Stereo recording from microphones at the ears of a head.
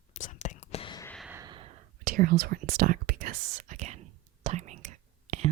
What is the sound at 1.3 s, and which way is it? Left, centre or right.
Whispering, right.